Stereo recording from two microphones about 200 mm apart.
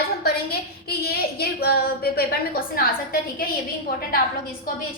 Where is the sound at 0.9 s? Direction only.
50° left (ahead or behind).